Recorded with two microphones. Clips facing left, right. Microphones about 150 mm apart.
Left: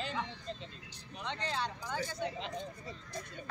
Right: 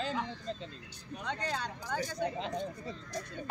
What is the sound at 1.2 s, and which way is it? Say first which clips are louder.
Speech: right 1 dB; 45° right (ahead or behind).